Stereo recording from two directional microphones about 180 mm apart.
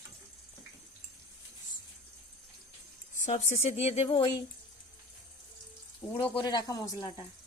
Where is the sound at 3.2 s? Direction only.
45° left (ahead or behind); by 4.4 s 25° left (ahead or behind).